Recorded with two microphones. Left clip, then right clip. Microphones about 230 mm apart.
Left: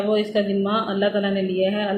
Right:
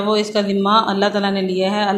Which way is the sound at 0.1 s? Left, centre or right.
Right.